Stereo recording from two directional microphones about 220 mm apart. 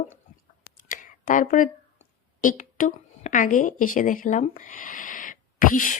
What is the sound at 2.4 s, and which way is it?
A woman's voice, 35° left (ahead or behind).